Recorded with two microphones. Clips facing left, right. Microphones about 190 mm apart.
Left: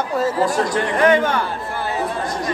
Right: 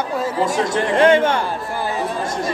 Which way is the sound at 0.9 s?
25° right (ahead or behind).